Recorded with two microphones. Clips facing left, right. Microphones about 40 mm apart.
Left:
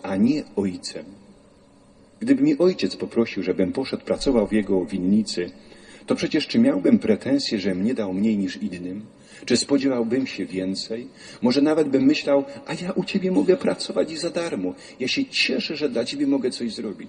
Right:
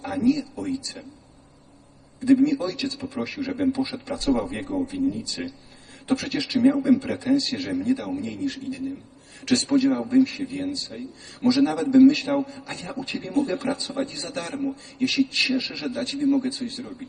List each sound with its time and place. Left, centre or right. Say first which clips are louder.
0.1 s a man's voice: left 2 dB; left
2.2 s a man's voice: left 2 dB; left